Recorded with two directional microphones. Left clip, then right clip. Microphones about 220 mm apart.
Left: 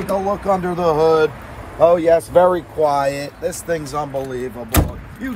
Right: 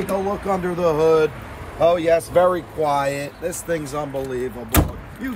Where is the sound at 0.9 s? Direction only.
25° left (ahead or behind).